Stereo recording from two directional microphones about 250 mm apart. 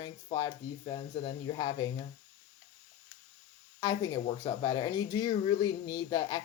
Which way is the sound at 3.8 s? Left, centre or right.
Centre.